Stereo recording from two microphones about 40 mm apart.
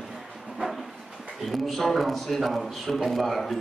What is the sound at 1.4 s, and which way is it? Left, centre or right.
Speech, centre.